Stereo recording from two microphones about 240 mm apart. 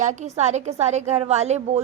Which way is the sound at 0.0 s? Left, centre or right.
Right.